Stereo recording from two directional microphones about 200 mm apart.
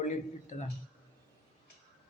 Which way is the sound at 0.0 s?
40° left (ahead or behind).